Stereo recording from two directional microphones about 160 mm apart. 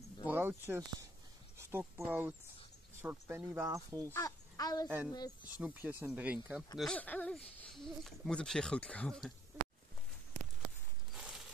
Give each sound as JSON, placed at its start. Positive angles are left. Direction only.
{"t": 0.3, "sound": "speech", "side_deg": -15}
{"t": 4.1, "sound": "a child's voice", "side_deg": 20}
{"t": 4.8, "sound": "speech", "side_deg": -10}
{"t": 5.1, "sound": "speech", "side_deg": 25}
{"t": 5.6, "sound": "speech", "side_deg": -10}
{"t": 6.8, "sound": "speech", "side_deg": 10}
{"t": 11.1, "sound": "a sound", "side_deg": 0}